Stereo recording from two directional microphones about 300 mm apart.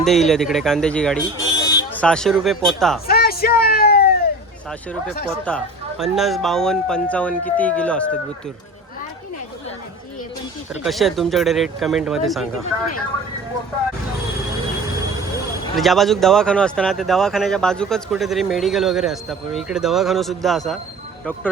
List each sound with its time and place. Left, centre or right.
0.0 s speech: centre
3.1 s a sound: left
5.3 s speech: centre
10.8 s speech: centre
15.7 s speech: centre